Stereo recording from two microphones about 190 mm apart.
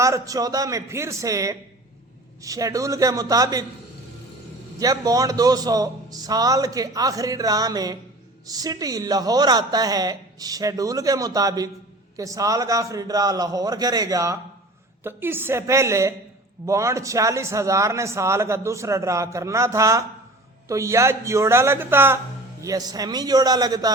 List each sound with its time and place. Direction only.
0.0 s a man's voice: 15° right (ahead or behind)
4.8 s a man's voice: 20° right (ahead or behind)